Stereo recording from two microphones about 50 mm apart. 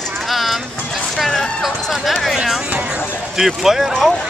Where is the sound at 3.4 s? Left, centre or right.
Centre.